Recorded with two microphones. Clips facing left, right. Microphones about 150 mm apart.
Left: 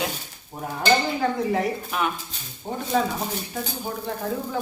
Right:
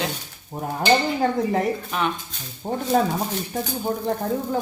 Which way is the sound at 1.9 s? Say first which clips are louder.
Right 1 dB; 5° left (ahead or behind).